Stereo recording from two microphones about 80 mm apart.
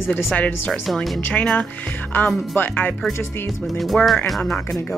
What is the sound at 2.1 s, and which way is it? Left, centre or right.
Speech, left.